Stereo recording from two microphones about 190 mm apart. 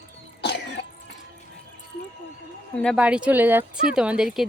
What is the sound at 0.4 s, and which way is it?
Cough, 60° left (ahead or behind).